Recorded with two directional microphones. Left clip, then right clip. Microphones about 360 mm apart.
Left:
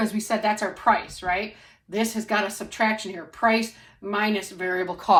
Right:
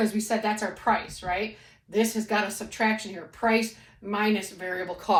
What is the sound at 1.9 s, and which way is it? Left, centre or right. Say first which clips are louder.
Speech: left 1 dB; centre.